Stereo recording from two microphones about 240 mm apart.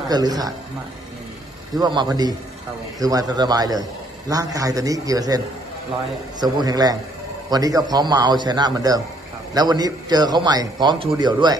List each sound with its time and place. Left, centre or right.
0.1 s a man's voice: centre
1.8 s a man's voice: centre
6.4 s a man's voice: centre